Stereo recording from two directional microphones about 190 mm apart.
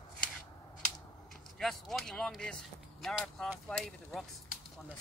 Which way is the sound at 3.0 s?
Centre (ahead or behind).